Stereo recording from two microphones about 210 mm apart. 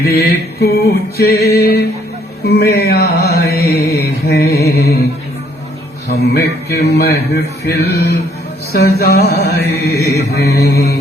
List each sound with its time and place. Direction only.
0.0 s mantra: 50° left (ahead or behind)
6.1 s mantra: 55° left (ahead or behind)